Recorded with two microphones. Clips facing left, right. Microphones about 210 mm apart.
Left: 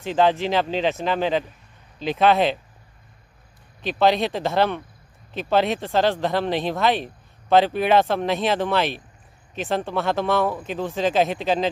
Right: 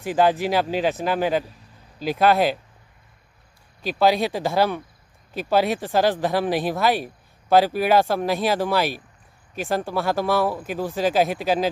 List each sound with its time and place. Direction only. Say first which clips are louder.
0.0 s speech: even; 10° right (ahead or behind)
3.8 s speech: even; 5° right (ahead or behind)